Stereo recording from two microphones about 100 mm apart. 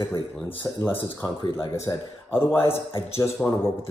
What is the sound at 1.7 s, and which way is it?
Speech, 25° left (ahead or behind).